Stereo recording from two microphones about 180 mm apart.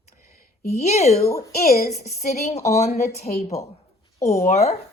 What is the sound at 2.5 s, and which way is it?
Speech, 40° left (ahead or behind).